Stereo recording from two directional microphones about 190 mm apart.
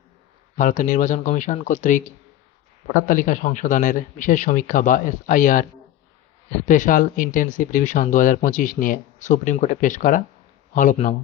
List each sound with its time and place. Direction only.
0.5 s speech: 40° left (ahead or behind)
6.7 s speech: 45° left (ahead or behind)